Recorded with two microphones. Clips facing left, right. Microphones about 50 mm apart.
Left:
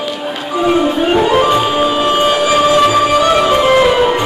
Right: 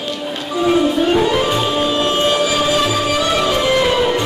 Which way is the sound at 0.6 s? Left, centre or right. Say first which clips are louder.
Left 2 dB; left.